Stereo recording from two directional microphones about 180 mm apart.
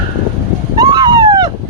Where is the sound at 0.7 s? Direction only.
20° right (ahead or behind).